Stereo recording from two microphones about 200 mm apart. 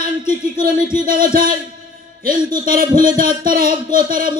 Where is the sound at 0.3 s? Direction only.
45° right (ahead or behind).